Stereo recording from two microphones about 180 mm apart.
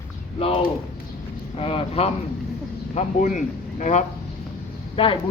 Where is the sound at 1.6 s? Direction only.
30° left (ahead or behind).